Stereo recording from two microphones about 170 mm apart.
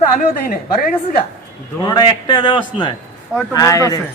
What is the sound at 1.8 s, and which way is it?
A man's voice, 25° left (ahead or behind).